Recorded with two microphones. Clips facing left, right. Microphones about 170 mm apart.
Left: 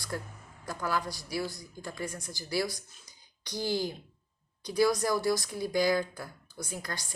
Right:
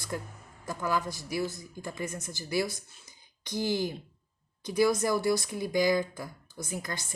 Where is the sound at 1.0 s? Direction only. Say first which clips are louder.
Right 1 dB; 50° right (ahead or behind).